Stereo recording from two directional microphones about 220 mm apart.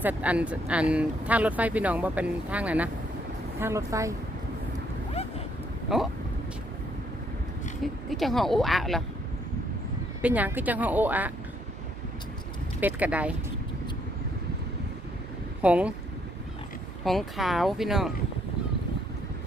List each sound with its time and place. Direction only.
0.0 s speech: 5° right (ahead or behind)
5.9 s speech: centre (ahead or behind)
8.1 s speech: centre (ahead or behind)
10.2 s speech: 5° right (ahead or behind)
12.8 s speech: 5° right (ahead or behind)
15.6 s speech: 5° right (ahead or behind)
17.0 s speech: centre (ahead or behind)